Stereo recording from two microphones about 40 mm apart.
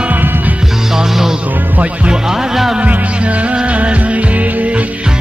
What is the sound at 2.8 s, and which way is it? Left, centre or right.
Music, right.